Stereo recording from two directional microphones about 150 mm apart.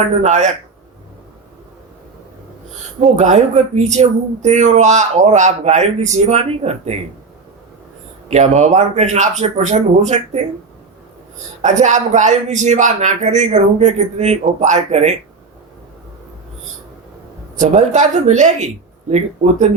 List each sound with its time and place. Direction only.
0.2 s speech: 55° right (ahead or behind)
3.0 s speech: 50° right (ahead or behind)
8.3 s speech: 50° right (ahead or behind)
11.6 s speech: 55° right (ahead or behind)
17.6 s speech: 55° right (ahead or behind)